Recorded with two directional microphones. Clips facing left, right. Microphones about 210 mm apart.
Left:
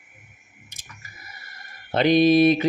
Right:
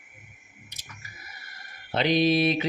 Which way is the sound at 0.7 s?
50° left (ahead or behind).